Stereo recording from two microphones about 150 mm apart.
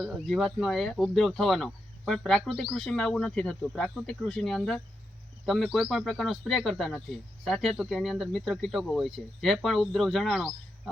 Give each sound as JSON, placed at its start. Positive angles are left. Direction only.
{"t": 0.0, "sound": "speech", "side_deg": 0}